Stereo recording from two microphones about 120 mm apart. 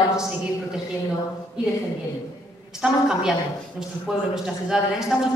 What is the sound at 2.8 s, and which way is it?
A woman's voice, 5° right (ahead or behind).